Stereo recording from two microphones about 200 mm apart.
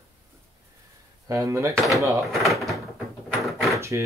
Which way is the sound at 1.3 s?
15° right (ahead or behind).